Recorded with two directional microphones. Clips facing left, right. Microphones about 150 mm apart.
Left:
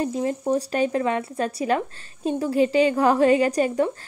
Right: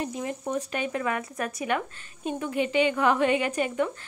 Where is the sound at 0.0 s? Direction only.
35° left (ahead or behind).